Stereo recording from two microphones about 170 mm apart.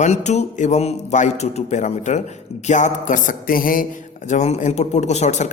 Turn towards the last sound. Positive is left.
turn(degrees=45)  # may be behind; listen again after turning